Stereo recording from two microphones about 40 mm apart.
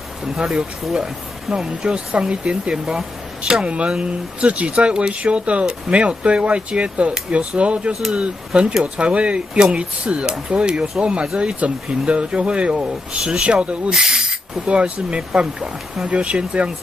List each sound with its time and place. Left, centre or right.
0.2 s speech: centre
13.8 s snake: centre
14.7 s speech: right